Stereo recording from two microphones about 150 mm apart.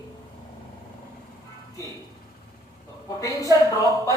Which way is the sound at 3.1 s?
20° left (ahead or behind).